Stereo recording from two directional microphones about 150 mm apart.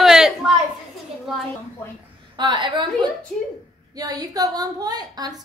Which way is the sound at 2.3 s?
30° right (ahead or behind).